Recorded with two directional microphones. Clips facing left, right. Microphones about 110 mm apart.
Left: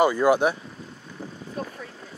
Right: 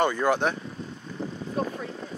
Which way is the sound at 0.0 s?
10° left (ahead or behind).